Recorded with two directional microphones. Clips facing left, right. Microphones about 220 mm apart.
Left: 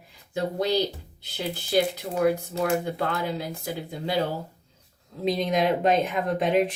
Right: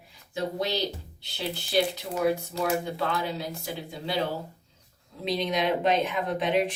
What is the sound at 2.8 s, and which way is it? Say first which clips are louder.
Speech: left 2 dB; 50° left (ahead or behind).